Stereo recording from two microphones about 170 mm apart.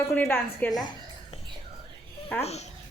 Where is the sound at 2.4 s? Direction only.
40° left (ahead or behind).